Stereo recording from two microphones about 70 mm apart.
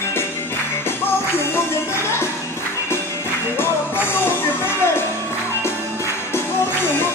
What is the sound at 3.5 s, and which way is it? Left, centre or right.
Music, left.